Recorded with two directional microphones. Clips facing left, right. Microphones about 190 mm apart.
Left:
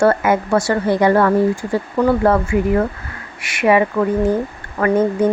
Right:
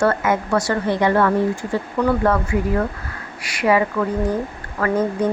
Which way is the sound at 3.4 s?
25° left (ahead or behind).